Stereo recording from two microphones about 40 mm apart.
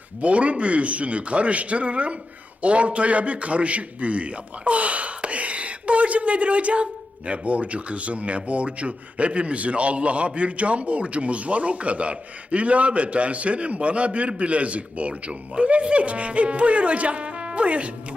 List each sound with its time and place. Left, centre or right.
0.2 s a man's voice: right